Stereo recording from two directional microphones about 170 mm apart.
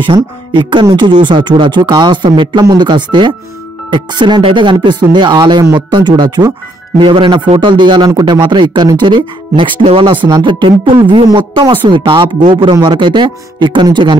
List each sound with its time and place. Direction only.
0.1 s speech: 25° right (ahead or behind)